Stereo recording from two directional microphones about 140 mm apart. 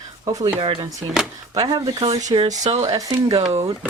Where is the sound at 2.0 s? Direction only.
45° right (ahead or behind).